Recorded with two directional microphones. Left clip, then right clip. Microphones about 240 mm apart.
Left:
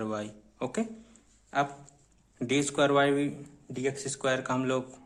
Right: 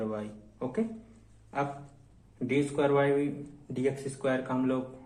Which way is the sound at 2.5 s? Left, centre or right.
Left.